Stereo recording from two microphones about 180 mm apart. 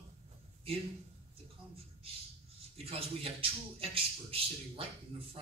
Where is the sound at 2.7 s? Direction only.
30° right (ahead or behind).